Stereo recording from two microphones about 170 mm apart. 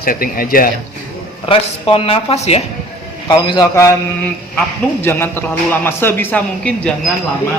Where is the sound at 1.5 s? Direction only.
35° left (ahead or behind).